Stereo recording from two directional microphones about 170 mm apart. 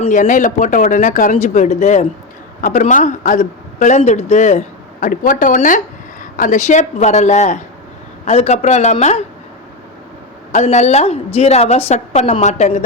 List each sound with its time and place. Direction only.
0.0 s a man's voice: 50° left (ahead or behind)
2.6 s a woman's voice: 50° left (ahead or behind)
10.5 s a woman's voice: 45° left (ahead or behind)